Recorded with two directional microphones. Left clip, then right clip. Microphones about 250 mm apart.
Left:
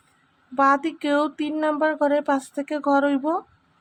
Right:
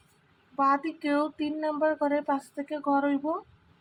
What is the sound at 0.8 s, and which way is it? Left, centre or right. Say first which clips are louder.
Speech: left 6 dB; left.